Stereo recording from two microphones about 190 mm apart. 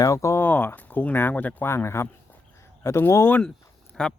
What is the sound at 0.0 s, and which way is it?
Speech, 15° left (ahead or behind).